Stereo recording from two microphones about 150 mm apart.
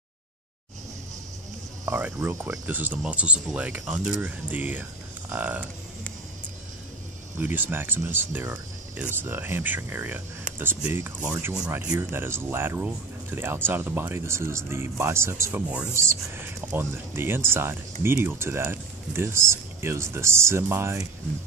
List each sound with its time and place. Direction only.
1.9 s speech: 15° right (ahead or behind)
7.3 s speech: 10° right (ahead or behind)